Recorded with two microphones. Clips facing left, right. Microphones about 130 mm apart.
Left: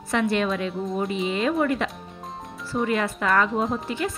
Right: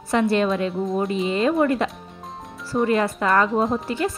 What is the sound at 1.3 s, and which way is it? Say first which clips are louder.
Speech: right 4 dB; 35° right (ahead or behind).